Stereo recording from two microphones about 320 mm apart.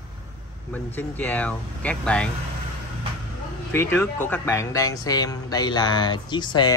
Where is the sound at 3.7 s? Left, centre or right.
Centre.